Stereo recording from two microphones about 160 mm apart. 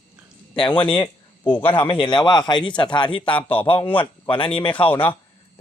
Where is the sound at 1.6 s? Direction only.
30° left (ahead or behind).